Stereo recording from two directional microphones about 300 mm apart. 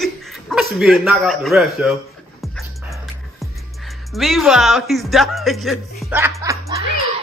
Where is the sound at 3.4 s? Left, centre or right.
Centre.